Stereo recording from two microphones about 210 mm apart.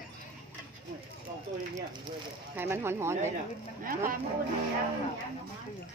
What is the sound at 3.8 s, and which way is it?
Speech, 40° right (ahead or behind).